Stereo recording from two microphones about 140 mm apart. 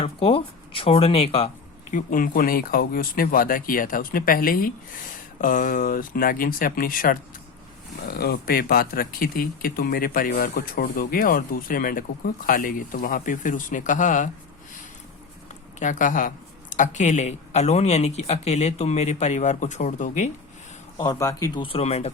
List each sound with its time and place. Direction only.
0.0 s speech: 40° left (ahead or behind)
1.9 s speech: 70° left (ahead or behind); by 4.7 s 90° left
5.4 s speech: 75° left (ahead or behind)
15.8 s speech: 65° left (ahead or behind)
21.0 s speech: 25° left (ahead or behind); by 22.1 s 50° left (ahead or behind)